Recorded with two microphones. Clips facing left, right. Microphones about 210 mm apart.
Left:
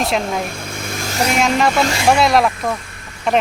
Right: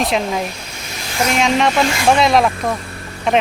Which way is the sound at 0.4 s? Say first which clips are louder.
Left 2 dB; 50° left (ahead or behind).